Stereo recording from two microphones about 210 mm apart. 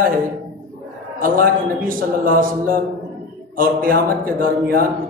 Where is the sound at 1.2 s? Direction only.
40° right (ahead or behind).